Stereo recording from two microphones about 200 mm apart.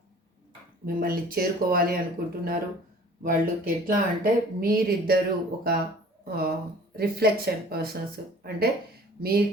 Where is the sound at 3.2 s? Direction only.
45° right (ahead or behind).